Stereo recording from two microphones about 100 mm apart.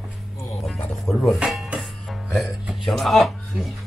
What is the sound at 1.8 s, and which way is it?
Music, 5° right (ahead or behind).